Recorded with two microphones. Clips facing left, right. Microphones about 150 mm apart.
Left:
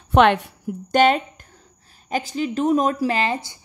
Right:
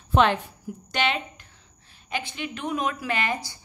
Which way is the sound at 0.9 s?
45° left (ahead or behind).